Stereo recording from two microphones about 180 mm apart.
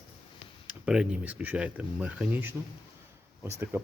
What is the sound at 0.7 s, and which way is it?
Speech, 5° right (ahead or behind).